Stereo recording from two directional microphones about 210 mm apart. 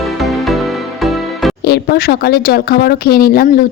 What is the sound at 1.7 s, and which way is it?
A woman's voice, 50° left (ahead or behind).